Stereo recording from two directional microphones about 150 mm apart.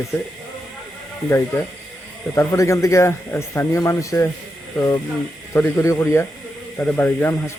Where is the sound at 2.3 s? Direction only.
20° left (ahead or behind).